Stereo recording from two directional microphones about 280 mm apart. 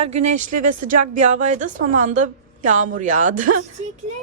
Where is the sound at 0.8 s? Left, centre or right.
Right.